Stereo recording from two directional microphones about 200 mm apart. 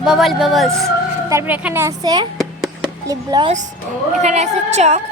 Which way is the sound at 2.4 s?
Centre (ahead or behind).